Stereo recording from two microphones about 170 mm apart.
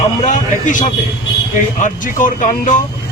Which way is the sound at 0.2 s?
50° left (ahead or behind).